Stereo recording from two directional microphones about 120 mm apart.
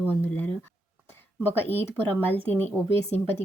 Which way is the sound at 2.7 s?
Centre (ahead or behind).